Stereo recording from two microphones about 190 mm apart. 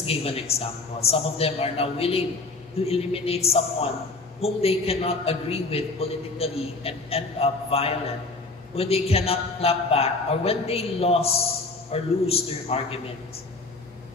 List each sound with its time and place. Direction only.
0.0 s a man's voice: 30° left (ahead or behind)